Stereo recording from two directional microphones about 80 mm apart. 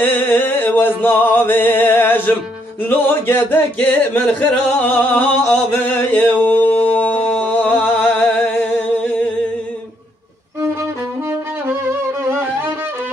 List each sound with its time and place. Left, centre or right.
0.0 s music: left
5.7 s a sound: left
12.3 s music: right